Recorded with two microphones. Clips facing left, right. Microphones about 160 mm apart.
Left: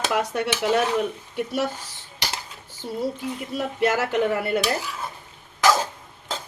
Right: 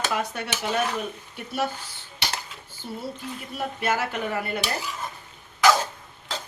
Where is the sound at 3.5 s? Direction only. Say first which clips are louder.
Left 4 dB; 90° left.